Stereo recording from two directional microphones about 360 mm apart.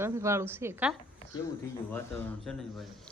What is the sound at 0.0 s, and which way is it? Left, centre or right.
A woman's voice, centre.